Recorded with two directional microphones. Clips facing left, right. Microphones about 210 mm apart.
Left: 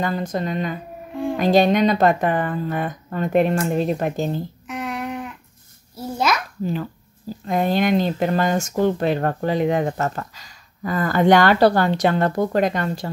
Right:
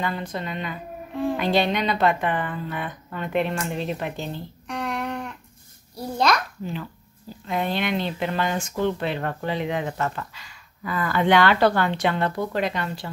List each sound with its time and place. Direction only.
0.0 s speech: 45° left (ahead or behind)
4.6 s a sound: centre (ahead or behind)
5.9 s a child's voice: 5° left (ahead or behind)
6.6 s speech: 45° left (ahead or behind)